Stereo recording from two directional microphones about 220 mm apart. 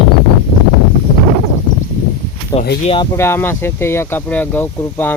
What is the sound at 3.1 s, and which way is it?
Speech, 10° left (ahead or behind).